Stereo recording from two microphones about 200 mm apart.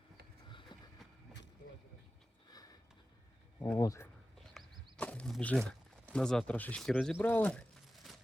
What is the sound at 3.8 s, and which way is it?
Speech, 15° left (ahead or behind).